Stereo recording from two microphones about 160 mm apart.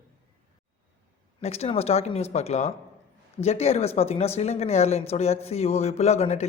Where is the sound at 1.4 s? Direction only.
40° left (ahead or behind).